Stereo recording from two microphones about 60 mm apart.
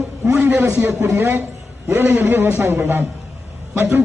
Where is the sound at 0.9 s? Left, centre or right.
Right.